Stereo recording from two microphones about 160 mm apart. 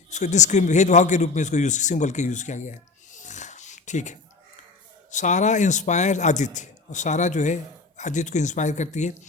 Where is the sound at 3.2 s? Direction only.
50° left (ahead or behind).